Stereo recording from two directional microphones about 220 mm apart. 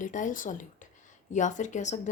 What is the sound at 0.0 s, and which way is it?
Speech, 35° left (ahead or behind).